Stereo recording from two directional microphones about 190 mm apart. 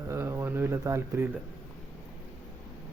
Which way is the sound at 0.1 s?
15° right (ahead or behind).